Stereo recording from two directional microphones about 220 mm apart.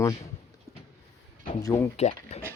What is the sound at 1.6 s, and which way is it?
Speech, 10° left (ahead or behind).